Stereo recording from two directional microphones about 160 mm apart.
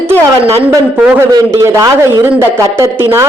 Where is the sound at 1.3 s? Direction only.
20° right (ahead or behind).